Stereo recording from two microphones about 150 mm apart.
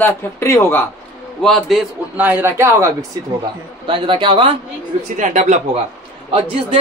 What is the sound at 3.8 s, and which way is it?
Speech, 35° right (ahead or behind).